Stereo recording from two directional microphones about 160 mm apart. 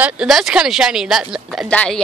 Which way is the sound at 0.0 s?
5° right (ahead or behind).